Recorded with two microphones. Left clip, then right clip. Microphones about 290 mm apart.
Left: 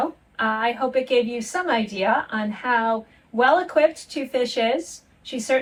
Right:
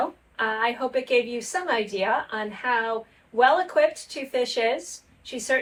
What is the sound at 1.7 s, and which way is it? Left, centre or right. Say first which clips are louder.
Speech: left 3 dB; centre.